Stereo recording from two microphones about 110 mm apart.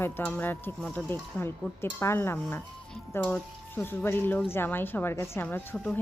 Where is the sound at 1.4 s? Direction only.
25° left (ahead or behind).